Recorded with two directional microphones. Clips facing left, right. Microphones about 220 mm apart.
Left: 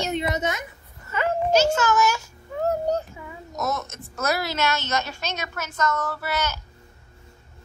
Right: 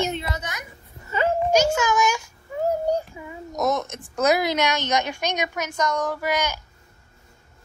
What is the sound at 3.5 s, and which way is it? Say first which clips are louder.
Speech: right 5 dB; 15° right (ahead or behind).